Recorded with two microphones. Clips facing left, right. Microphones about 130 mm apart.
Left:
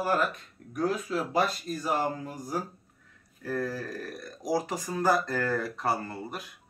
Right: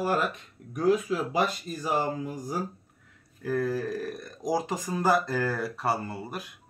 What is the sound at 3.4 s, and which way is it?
Speech, 15° right (ahead or behind).